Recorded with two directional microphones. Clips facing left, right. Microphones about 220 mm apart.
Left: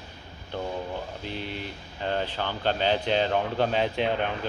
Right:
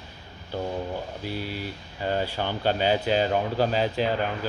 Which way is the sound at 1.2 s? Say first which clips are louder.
Right 2 dB; 5° right (ahead or behind).